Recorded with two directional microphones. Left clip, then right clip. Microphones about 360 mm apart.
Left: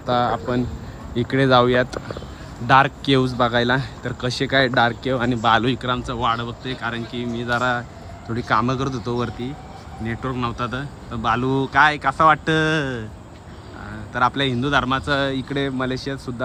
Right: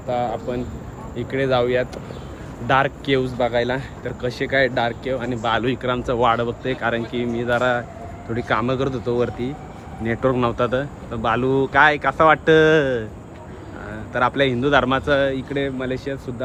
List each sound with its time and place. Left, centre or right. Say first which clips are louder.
0.1 s speech: left 3 dB; centre
14.1 s speech: right 1 dB; centre